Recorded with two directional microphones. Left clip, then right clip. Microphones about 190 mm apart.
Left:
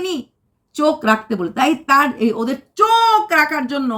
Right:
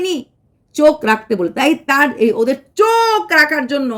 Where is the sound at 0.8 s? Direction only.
10° right (ahead or behind).